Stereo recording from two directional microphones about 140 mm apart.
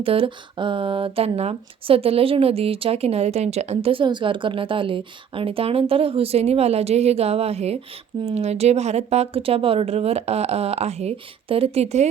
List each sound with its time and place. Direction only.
0.0 s speech: 40° right (ahead or behind)